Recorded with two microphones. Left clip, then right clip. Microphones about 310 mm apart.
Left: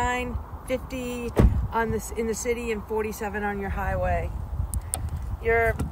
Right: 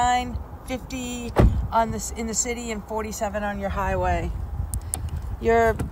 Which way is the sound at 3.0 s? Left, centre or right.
Centre.